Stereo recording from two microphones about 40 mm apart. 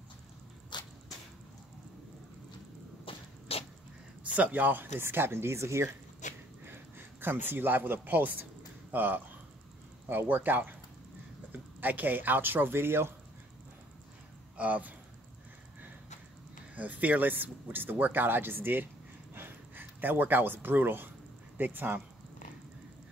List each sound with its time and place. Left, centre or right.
4.2 s speech: right
5.0 s speech: right
6.6 s speech: right
10.2 s speech: right
11.8 s speech: right
14.6 s speech: right
16.7 s speech: right
19.3 s a sound: right
21.5 s speech: right